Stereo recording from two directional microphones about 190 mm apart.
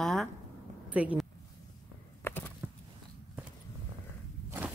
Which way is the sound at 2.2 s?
10° left (ahead or behind).